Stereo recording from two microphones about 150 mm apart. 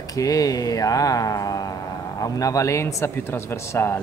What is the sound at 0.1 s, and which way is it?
Speech, 25° left (ahead or behind).